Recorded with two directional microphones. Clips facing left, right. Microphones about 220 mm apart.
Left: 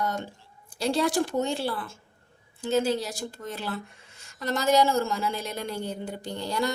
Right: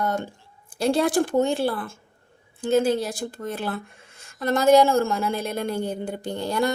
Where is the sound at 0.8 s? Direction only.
50° right (ahead or behind).